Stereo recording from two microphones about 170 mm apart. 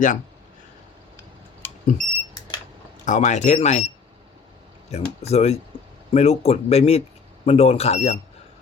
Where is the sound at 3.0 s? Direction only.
50° left (ahead or behind).